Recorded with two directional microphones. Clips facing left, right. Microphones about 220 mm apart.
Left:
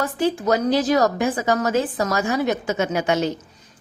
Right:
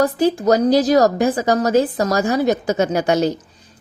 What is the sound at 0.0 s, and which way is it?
A woman's voice, 40° right (ahead or behind).